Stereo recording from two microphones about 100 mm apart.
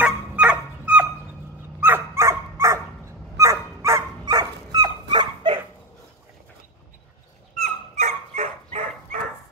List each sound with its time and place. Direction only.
0.0 s dog: 15° right (ahead or behind); by 4.0 s 30° right (ahead or behind)
4.3 s dog: 40° right (ahead or behind)
7.5 s dog: 90° right